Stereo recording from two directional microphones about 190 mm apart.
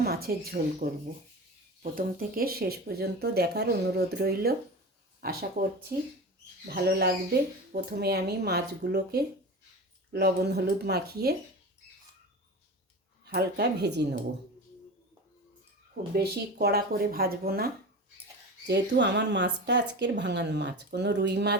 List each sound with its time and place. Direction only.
0.0 s speech: 55° right (ahead or behind)
13.2 s speech: 60° right (ahead or behind)
16.1 s speech: 55° right (ahead or behind)
18.7 s speech: 65° right (ahead or behind)